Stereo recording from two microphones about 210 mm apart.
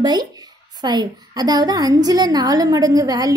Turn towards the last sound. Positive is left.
turn(degrees=-20)  # may be behind; listen again after turning